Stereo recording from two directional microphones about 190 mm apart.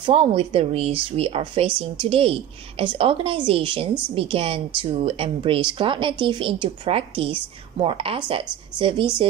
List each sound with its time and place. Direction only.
0.0 s speech: 30° right (ahead or behind)